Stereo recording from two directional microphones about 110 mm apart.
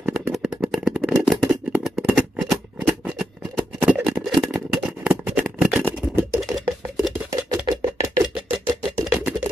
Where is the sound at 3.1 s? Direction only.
10° right (ahead or behind).